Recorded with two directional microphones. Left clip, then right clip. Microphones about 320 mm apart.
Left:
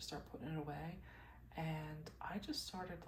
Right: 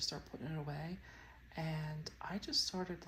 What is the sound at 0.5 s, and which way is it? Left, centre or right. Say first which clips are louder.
Speech: even; right.